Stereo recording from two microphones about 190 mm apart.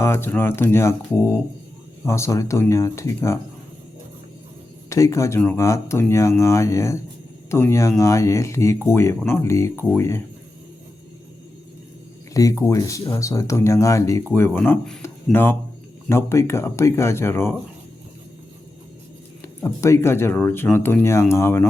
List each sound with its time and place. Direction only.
0.0 s speech: 10° left (ahead or behind)
4.9 s speech: 15° left (ahead or behind)
12.3 s speech: 15° left (ahead or behind)
19.4 s speech: 15° left (ahead or behind)